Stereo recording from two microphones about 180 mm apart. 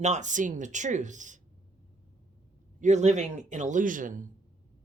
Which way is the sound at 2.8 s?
40° right (ahead or behind).